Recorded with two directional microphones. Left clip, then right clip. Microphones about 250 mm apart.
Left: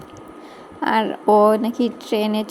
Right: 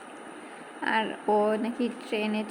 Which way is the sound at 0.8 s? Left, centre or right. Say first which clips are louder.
Left 8 dB; left.